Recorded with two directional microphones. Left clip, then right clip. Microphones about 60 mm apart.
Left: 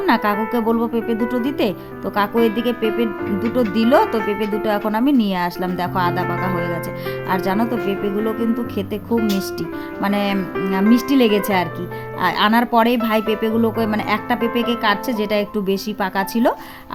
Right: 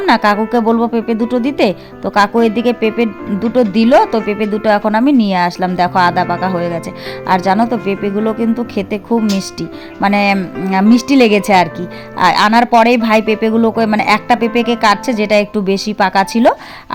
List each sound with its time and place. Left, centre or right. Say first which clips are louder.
0.0 s a woman's voice: right 6 dB; right
12.2 s a woman's voice: right 7 dB; right
13.9 s a woman's voice: right 9 dB; right
14.4 s a woman's voice: right 7 dB; right